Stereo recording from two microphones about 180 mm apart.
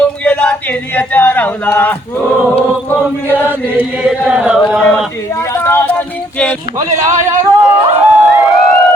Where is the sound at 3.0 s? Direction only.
10° right (ahead or behind).